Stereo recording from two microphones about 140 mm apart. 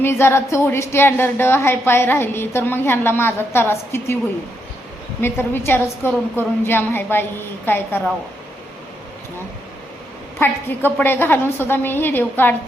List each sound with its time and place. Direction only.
0.0 s a woman's voice: 20° left (ahead or behind)
5.2 s a woman's voice: 15° left (ahead or behind)
10.4 s a woman's voice: 15° left (ahead or behind)